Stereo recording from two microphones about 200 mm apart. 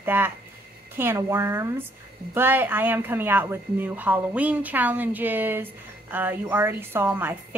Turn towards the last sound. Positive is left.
turn(degrees=-10)  # may be behind; listen again after turning